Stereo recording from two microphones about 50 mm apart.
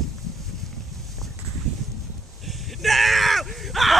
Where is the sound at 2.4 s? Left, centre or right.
Centre.